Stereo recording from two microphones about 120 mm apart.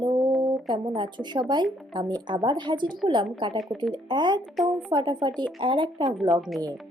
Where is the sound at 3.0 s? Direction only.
5° right (ahead or behind).